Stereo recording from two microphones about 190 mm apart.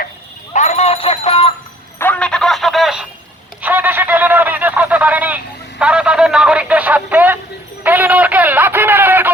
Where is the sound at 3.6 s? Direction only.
10° right (ahead or behind).